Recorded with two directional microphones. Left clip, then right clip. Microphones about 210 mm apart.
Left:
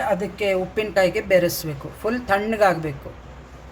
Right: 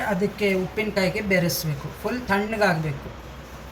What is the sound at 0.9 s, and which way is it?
Speech, 45° left (ahead or behind).